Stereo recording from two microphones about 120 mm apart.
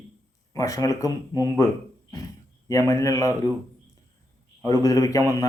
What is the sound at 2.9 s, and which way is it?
Speech, 30° left (ahead or behind).